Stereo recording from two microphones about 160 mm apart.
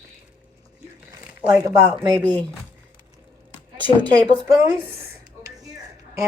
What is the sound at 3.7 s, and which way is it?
Speech, 10° left (ahead or behind).